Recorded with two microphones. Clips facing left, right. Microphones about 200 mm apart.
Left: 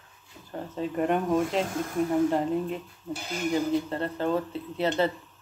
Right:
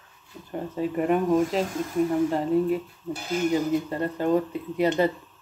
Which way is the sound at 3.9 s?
10° right (ahead or behind).